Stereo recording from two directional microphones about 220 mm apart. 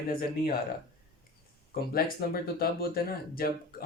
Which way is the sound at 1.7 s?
45° left (ahead or behind).